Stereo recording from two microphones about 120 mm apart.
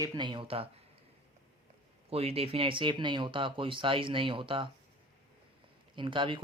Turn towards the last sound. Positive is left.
turn(degrees=-45)  # may be behind; listen again after turning